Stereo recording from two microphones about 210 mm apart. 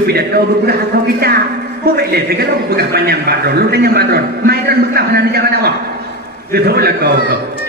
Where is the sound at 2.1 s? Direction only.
50° right (ahead or behind).